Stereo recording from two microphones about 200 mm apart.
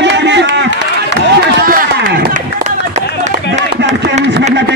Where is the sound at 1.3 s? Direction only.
45° right (ahead or behind).